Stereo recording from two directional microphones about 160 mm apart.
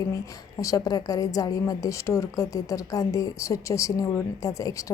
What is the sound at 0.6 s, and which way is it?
A woman's voice, 20° left (ahead or behind).